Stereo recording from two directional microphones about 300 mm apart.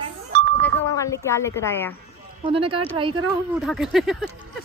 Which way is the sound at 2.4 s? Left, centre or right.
Centre.